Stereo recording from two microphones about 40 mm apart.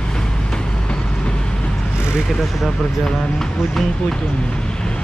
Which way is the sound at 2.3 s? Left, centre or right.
Centre.